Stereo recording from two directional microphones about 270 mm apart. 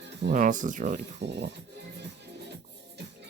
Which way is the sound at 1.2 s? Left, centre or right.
Right.